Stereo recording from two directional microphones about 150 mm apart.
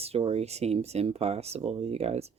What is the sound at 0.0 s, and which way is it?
Speech, 40° right (ahead or behind).